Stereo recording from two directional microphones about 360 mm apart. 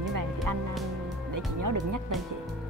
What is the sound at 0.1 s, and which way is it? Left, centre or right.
Music, right.